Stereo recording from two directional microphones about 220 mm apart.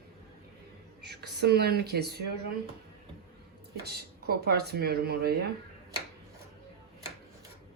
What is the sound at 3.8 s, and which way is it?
Speech, 45° right (ahead or behind).